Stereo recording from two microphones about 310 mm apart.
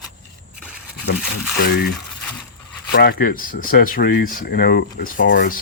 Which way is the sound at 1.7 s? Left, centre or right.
Left.